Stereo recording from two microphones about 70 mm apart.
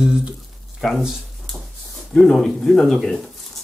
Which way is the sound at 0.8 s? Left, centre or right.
Centre.